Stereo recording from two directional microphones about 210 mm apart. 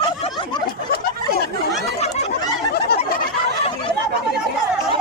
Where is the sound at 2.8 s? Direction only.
50° left (ahead or behind).